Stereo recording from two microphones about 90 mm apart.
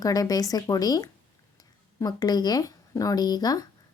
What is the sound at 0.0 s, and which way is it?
A woman's voice, 45° left (ahead or behind).